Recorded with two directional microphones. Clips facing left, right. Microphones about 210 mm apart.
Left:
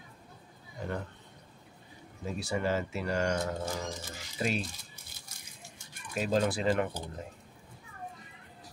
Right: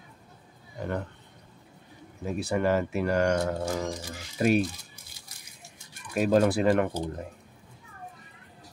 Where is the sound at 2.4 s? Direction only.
60° right (ahead or behind).